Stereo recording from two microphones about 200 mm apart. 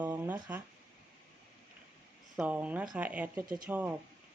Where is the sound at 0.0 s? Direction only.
10° right (ahead or behind).